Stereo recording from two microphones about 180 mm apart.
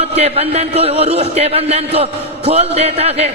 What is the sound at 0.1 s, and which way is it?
A man's voice, 35° right (ahead or behind).